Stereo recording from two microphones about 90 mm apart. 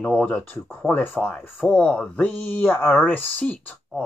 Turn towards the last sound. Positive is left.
turn(degrees=15)  # may be behind; listen again after turning